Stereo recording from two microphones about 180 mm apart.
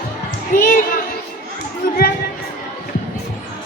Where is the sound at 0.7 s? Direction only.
50° left (ahead or behind).